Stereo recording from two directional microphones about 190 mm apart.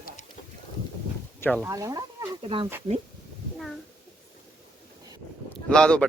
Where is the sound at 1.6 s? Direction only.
20° right (ahead or behind).